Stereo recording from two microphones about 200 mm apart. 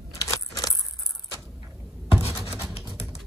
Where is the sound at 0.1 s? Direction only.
15° left (ahead or behind).